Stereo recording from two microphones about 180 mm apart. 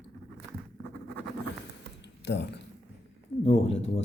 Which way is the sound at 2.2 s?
70° left (ahead or behind).